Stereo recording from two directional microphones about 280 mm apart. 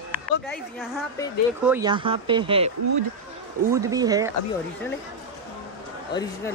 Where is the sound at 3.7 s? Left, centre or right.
Centre.